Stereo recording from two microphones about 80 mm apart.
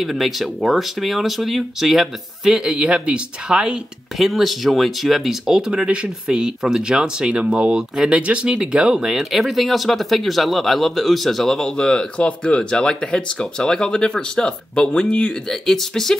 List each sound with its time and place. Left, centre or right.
0.0 s speech: centre
4.3 s speech: centre